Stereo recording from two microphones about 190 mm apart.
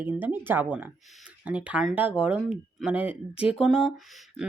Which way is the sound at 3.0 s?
30° left (ahead or behind).